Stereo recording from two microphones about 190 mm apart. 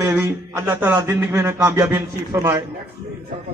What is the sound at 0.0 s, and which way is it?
A man's voice, 15° right (ahead or behind).